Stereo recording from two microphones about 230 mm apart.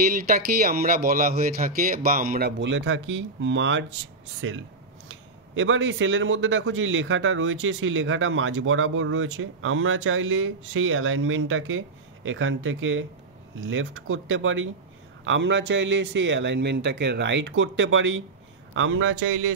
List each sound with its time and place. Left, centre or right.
0.3 s speech: right